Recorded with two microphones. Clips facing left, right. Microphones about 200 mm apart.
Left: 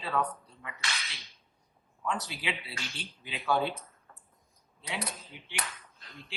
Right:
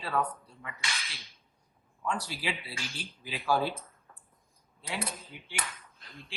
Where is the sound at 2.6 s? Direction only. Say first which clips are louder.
Right 1 dB; centre (ahead or behind).